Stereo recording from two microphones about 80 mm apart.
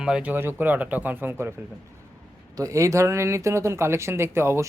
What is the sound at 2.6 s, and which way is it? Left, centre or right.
Speech, right.